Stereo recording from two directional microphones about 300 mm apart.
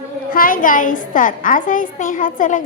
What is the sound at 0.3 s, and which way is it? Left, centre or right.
A woman's voice, left.